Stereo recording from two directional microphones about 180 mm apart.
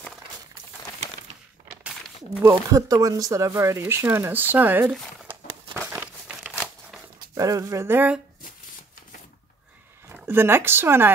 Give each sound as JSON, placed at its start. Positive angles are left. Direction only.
{"t": 2.4, "sound": "speech", "side_deg": -20}
{"t": 5.9, "sound": "crumpling", "side_deg": -10}
{"t": 7.3, "sound": "speech", "side_deg": -20}
{"t": 10.0, "sound": "speech", "side_deg": -15}